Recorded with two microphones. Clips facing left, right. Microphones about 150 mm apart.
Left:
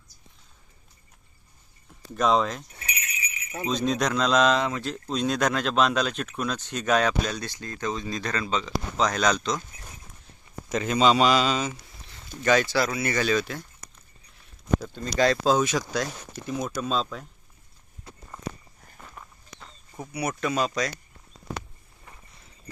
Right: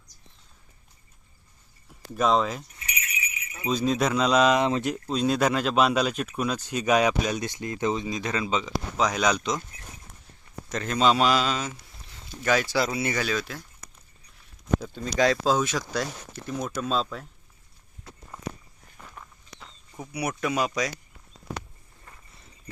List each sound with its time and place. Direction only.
2.1 s speech: centre (ahead or behind)
3.7 s speech: 5° right (ahead or behind)
4.6 s speech: 20° right (ahead or behind)
5.0 s speech: 5° right (ahead or behind)
10.7 s speech: 5° left (ahead or behind)
12.7 s speech: 20° right (ahead or behind)
13.1 s speech: centre (ahead or behind)
14.8 s speech: centre (ahead or behind)
18.9 s walk: 5° left (ahead or behind)
20.1 s speech: 10° right (ahead or behind)